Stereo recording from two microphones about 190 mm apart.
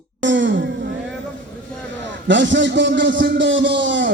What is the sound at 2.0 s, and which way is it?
Speech, 70° right (ahead or behind).